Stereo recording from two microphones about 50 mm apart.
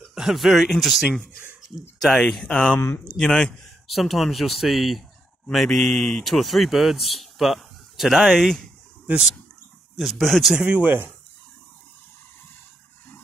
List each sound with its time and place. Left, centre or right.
0.1 s speech: centre
2.4 s a man's voice: centre
3.9 s speech: centre
9.9 s speech: centre